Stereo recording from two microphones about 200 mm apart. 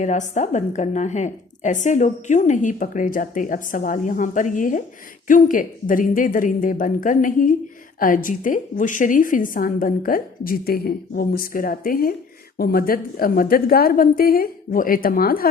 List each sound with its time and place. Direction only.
0.0 s a woman's voice: 40° left (ahead or behind)